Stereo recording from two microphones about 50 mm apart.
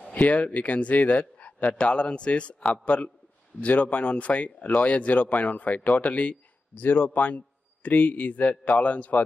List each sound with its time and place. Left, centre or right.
0.1 s a man's voice: left